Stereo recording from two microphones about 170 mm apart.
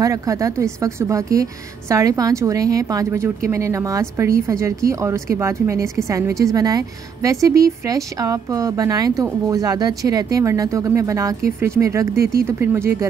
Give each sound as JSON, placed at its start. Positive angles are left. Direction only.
{"t": 0.0, "sound": "a woman's voice", "side_deg": -20}